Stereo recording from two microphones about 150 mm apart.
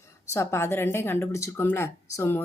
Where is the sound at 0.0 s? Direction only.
20° left (ahead or behind).